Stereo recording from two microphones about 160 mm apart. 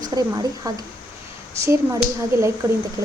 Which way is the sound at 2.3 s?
20° right (ahead or behind).